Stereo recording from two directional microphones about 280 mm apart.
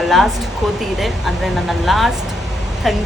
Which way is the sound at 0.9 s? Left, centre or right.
Centre.